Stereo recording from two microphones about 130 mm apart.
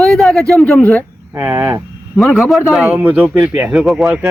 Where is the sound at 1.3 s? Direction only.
15° right (ahead or behind).